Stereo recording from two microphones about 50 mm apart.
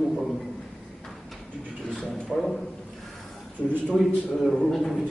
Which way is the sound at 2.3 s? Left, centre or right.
Centre.